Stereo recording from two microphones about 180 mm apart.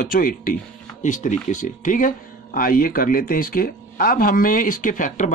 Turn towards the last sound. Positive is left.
turn(degrees=45)  # may be behind; listen again after turning